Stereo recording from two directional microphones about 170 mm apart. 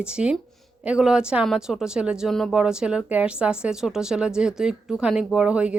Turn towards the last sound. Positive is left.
turn(degrees=-5)  # may be behind; listen again after turning